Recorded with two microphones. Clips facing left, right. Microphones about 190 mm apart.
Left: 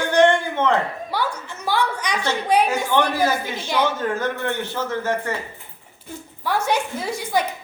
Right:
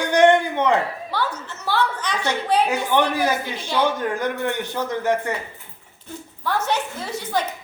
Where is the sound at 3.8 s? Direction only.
15° right (ahead or behind).